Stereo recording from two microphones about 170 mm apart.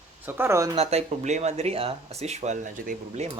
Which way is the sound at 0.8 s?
40° right (ahead or behind).